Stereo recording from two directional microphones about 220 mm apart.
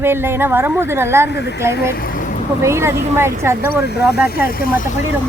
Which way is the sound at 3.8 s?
50° left (ahead or behind).